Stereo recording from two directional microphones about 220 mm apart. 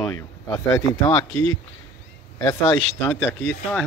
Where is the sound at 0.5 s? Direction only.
15° left (ahead or behind).